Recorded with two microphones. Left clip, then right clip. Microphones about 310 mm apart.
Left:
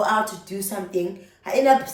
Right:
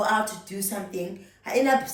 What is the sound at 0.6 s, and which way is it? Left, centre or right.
Speech, centre.